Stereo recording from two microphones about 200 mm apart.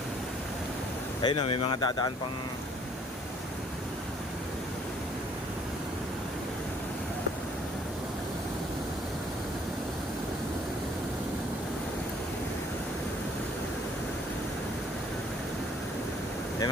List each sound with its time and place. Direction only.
1.2 s speech: 25° left (ahead or behind)